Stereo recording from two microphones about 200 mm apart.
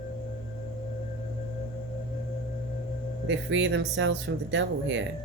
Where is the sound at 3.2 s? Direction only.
65° right (ahead or behind).